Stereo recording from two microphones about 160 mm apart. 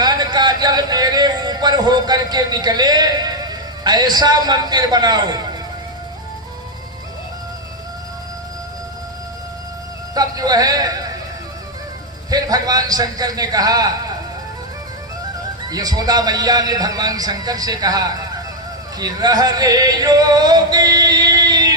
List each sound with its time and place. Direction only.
0.0 s music: 25° right (ahead or behind)
10.2 s music: 25° right (ahead or behind)
12.3 s music: 25° right (ahead or behind)
15.7 s music: 25° right (ahead or behind)